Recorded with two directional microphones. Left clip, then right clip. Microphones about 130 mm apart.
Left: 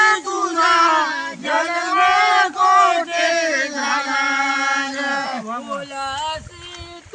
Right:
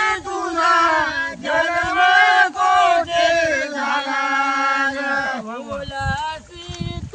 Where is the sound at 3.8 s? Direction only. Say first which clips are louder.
Left 1 dB; 5° left (ahead or behind).